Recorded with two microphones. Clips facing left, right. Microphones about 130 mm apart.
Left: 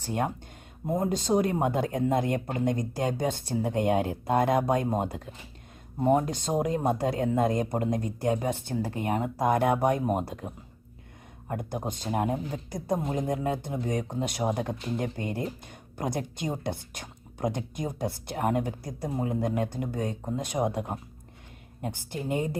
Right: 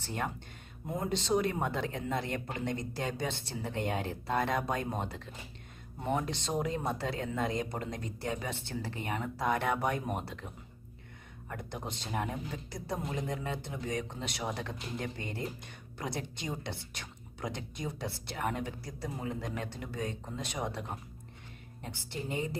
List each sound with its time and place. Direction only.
0.9 s speech: 45° left (ahead or behind)